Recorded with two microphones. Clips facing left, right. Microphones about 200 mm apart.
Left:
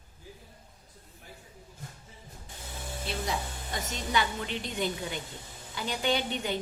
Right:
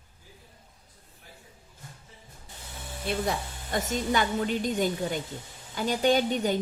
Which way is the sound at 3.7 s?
45° right (ahead or behind).